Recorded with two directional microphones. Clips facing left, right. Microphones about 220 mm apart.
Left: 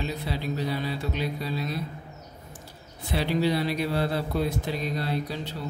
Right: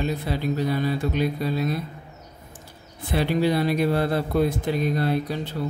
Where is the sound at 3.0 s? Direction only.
50° right (ahead or behind).